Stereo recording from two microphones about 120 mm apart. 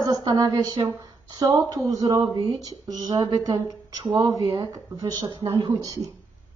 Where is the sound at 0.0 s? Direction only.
35° right (ahead or behind).